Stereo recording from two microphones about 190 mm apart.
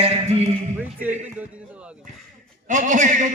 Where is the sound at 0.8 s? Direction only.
10° right (ahead or behind).